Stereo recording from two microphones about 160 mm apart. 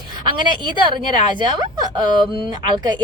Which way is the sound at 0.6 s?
30° right (ahead or behind).